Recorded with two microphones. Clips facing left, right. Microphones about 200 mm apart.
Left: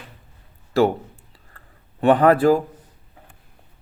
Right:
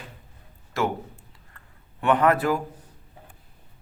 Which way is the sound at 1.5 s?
35° left (ahead or behind).